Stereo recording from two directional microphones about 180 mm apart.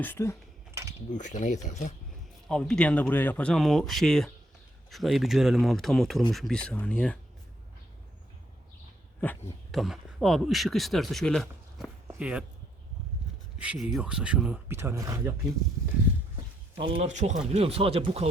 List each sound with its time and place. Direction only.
0.0 s speech: 10° left (ahead or behind)
0.7 s a sound: 15° right (ahead or behind)
1.1 s speech: 45° left (ahead or behind)
2.5 s speech: 5° left (ahead or behind)
9.2 s speech: 10° left (ahead or behind)
9.8 s speech: centre (ahead or behind)
13.6 s speech: 5° right (ahead or behind)
16.7 s speech: 30° right (ahead or behind)